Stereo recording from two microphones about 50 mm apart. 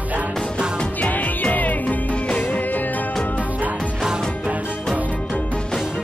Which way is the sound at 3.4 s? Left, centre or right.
Right.